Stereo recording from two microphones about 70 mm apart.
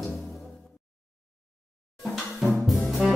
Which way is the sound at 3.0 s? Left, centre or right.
Centre.